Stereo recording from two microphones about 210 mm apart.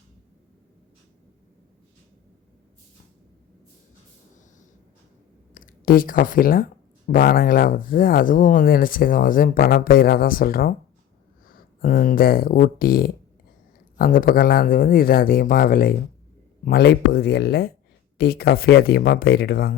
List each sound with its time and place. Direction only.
5.5 s speech: 45° left (ahead or behind)